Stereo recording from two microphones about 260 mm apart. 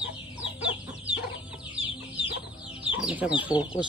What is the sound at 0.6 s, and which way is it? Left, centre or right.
Chicken, left.